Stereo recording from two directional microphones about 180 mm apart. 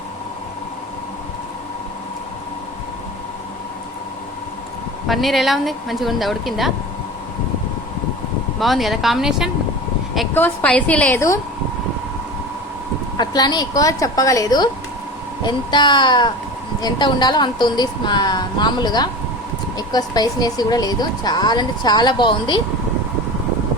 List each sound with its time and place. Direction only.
5.0 s speech: centre (ahead or behind)
8.5 s speech: centre (ahead or behind)
10.3 s a woman's voice: 10° left (ahead or behind)
13.1 s speech: 20° left (ahead or behind)